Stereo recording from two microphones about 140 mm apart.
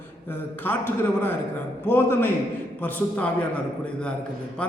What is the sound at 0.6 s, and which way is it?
A man's voice, 15° left (ahead or behind).